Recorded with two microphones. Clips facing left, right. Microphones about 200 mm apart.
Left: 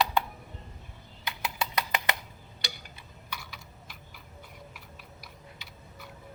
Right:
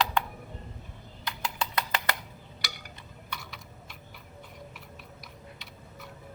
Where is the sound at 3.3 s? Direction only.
Centre (ahead or behind).